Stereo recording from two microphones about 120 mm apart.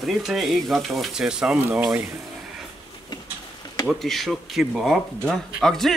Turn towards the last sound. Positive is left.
turn(degrees=0)  # may be behind; listen again after turning